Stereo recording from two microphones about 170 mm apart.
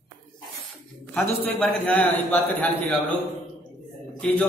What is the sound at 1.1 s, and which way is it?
A man's voice, 10° left (ahead or behind).